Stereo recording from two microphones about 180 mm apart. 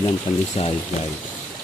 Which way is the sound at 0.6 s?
35° left (ahead or behind).